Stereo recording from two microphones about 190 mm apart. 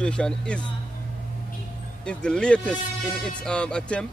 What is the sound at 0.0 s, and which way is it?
Speech, 5° left (ahead or behind).